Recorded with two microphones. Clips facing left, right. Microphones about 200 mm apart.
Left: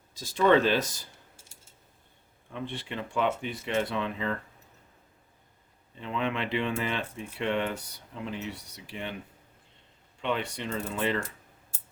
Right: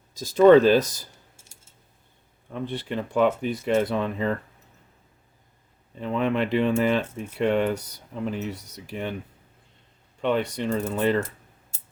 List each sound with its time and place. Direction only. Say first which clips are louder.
0.1 s speech: right 8 dB; 40° right (ahead or behind)
2.5 s speech: right 6 dB; 40° right (ahead or behind)
6.0 s speech: right 7 dB; 45° right (ahead or behind)
10.2 s speech: right 7 dB; 45° right (ahead or behind)